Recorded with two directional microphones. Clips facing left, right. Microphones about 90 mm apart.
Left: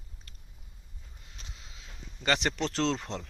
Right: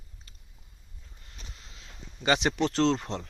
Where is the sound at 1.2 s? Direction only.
15° left (ahead or behind).